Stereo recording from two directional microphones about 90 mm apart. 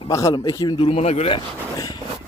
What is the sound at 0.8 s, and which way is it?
Speech, 75° left (ahead or behind).